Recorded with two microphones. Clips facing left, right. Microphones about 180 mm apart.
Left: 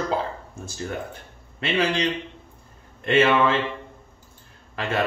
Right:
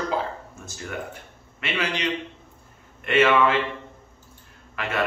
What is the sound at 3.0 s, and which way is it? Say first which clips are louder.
Speech: even; 30° left (ahead or behind).